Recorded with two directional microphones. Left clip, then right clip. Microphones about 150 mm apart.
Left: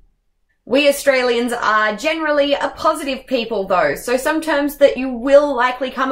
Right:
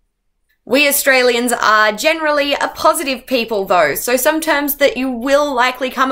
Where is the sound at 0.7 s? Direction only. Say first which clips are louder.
Right 2 dB; 15° right (ahead or behind).